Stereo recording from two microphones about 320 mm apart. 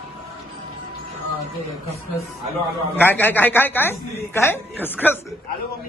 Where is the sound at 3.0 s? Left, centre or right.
Centre.